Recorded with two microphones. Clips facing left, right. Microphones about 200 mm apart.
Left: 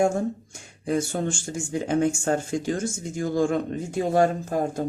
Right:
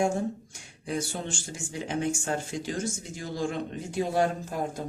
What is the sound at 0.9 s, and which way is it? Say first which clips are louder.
Speech: left 7 dB; 50° left (ahead or behind).